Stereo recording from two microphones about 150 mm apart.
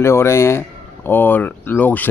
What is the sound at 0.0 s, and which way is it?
Speech, 20° left (ahead or behind).